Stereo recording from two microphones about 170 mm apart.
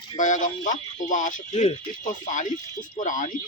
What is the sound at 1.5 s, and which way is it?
Speech, 35° left (ahead or behind).